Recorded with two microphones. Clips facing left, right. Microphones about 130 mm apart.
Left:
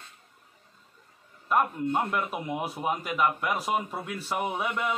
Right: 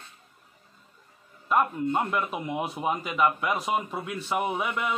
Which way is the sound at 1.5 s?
Centre (ahead or behind).